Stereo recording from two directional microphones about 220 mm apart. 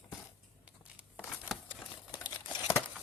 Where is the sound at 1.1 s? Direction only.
5° left (ahead or behind).